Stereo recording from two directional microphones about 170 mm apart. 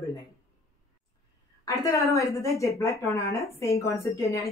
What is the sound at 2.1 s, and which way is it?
A woman's voice, 20° left (ahead or behind).